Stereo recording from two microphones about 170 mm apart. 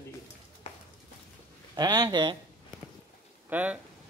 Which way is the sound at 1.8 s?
25° right (ahead or behind).